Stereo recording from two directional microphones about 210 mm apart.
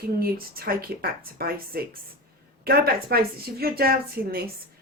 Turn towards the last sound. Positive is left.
turn(degrees=-45)  # may be behind; listen again after turning